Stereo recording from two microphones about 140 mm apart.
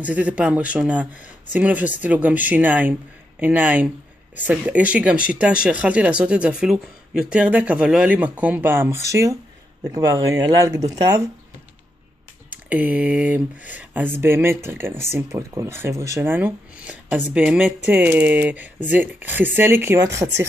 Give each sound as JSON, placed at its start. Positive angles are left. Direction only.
{"t": 0.0, "sound": "speech", "side_deg": -10}
{"t": 12.6, "sound": "speech", "side_deg": -10}